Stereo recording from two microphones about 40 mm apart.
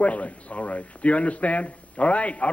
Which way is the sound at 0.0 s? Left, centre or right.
Left.